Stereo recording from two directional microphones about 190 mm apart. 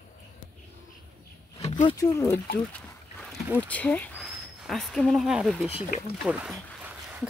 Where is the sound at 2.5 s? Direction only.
5° left (ahead or behind).